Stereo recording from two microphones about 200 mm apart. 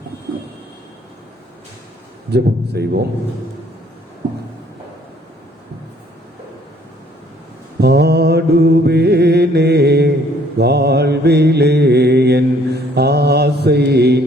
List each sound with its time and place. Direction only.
2.3 s a man's voice: 55° right (ahead or behind)
7.8 s mantra: 55° right (ahead or behind)